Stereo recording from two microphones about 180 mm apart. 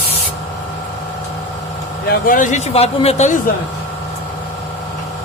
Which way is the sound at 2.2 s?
45° left (ahead or behind).